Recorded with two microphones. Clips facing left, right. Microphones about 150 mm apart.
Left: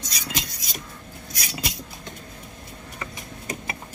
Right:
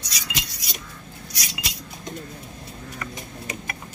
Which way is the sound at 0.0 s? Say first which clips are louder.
Left 2 dB; 45° left (ahead or behind).